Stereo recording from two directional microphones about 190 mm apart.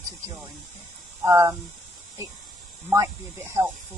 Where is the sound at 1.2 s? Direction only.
15° right (ahead or behind).